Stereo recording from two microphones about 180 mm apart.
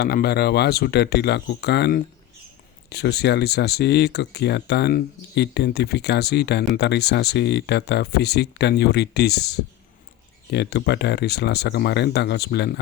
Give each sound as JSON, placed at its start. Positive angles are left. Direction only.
{"t": 0.0, "sound": "speech", "side_deg": 60}